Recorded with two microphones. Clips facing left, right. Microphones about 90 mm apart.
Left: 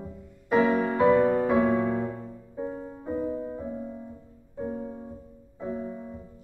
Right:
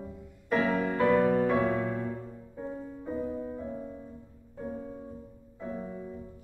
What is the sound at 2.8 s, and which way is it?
Music, 30° left (ahead or behind).